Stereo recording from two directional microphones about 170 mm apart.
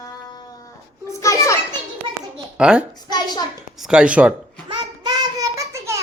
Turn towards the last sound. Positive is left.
turn(degrees=-15)  # may be behind; listen again after turning